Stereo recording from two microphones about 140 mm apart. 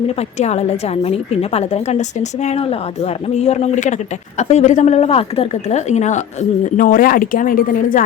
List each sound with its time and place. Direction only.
0.2 s a woman's voice: 50° left (ahead or behind)
6.7 s speech: 75° left (ahead or behind)